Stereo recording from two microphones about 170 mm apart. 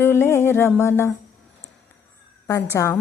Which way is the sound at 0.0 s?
15° left (ahead or behind).